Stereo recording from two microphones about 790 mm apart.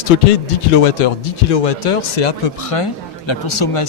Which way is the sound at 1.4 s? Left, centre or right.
Left.